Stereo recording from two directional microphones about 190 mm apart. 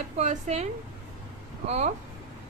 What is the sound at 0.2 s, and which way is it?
Speech, 35° right (ahead or behind).